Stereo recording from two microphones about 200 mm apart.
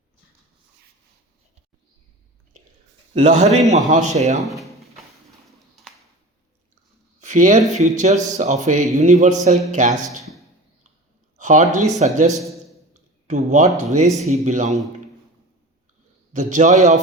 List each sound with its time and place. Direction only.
3.2 s speech: 35° right (ahead or behind)
4.4 s drawer open or close: centre (ahead or behind)
7.2 s speech: 40° right (ahead or behind)
11.3 s speech: 40° right (ahead or behind)
12.9 s a sound: 35° right (ahead or behind)
13.7 s speech: 35° right (ahead or behind)
16.3 s speech: 40° right (ahead or behind)